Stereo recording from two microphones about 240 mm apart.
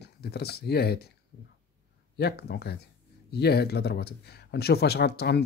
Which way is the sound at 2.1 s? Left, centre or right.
Left.